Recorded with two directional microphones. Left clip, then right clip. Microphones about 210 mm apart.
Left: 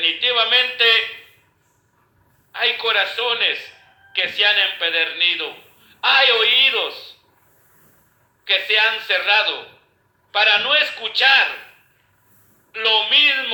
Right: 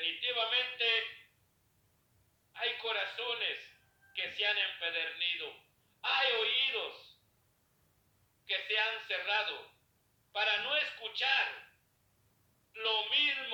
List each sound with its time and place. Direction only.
0.0 s a man's voice: 35° left (ahead or behind)
2.5 s a man's voice: 35° left (ahead or behind)
8.4 s a man's voice: 35° left (ahead or behind)
12.7 s a man's voice: 35° left (ahead or behind)